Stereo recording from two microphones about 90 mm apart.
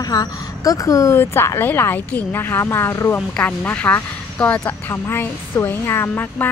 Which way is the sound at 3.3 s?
15° left (ahead or behind).